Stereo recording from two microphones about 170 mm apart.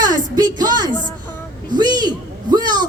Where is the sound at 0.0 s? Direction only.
25° right (ahead or behind).